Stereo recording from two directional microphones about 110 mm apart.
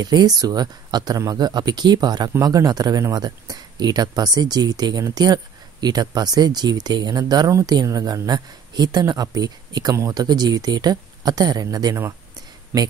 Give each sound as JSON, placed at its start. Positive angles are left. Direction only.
{"t": 0.0, "sound": "speech", "side_deg": -40}
{"t": 10.2, "sound": "speech", "side_deg": -40}
{"t": 12.7, "sound": "speech", "side_deg": -20}